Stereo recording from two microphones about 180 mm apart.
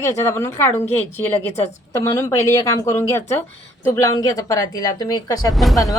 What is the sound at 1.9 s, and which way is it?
A woman's voice, 15° left (ahead or behind).